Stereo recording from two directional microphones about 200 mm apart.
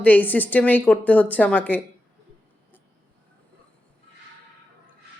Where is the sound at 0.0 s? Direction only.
10° left (ahead or behind).